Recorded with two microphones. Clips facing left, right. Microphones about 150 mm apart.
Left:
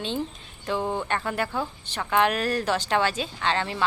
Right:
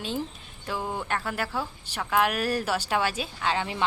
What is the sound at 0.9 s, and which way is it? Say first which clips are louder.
A woman's voice: left 3 dB; 5° right (ahead or behind).